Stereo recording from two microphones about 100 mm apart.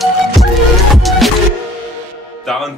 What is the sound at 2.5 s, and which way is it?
Speech, centre (ahead or behind).